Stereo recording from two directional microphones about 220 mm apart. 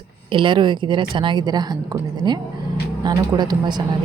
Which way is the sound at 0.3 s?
20° right (ahead or behind).